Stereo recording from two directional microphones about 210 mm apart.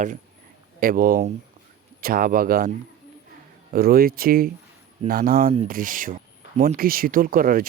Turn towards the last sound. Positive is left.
turn(degrees=-40)  # may be behind; listen again after turning